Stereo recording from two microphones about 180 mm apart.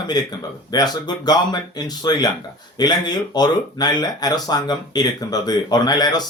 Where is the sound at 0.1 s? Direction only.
20° left (ahead or behind).